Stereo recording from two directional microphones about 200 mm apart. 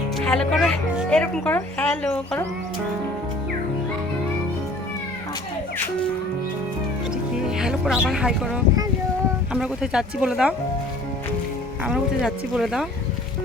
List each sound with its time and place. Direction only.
0.2 s a woman's voice: 5° left (ahead or behind)
7.4 s a woman's voice: 5° right (ahead or behind)
11.9 s a woman's voice: centre (ahead or behind)